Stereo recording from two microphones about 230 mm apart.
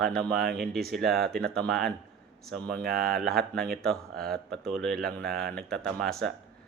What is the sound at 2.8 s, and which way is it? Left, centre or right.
Speech, right.